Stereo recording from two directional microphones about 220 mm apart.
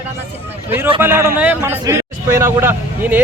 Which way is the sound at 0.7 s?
10° right (ahead or behind).